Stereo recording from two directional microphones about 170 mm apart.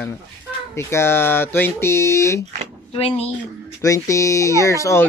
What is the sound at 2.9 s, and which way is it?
Speech, 35° left (ahead or behind).